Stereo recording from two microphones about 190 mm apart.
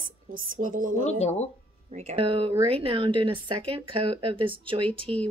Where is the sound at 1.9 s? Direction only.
35° right (ahead or behind).